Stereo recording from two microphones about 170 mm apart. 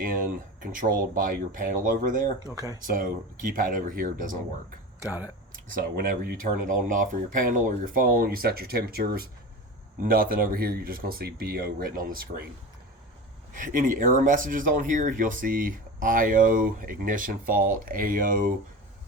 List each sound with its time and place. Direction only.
0.0 s speech: 55° right (ahead or behind)
2.4 s speech: 20° right (ahead or behind)
2.8 s speech: 55° right (ahead or behind)
4.9 s speech: 10° right (ahead or behind)
5.7 s speech: 60° right (ahead or behind)
13.6 s speech: 50° right (ahead or behind)